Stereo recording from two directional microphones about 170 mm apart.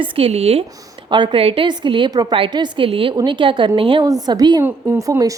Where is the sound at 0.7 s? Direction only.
25° right (ahead or behind).